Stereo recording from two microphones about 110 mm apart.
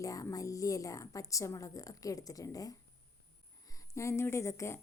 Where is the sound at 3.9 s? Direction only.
25° left (ahead or behind).